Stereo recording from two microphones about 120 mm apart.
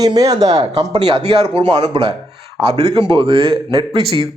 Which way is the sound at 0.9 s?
45° right (ahead or behind).